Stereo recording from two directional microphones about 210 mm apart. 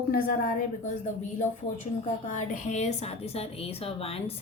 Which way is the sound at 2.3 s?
35° left (ahead or behind).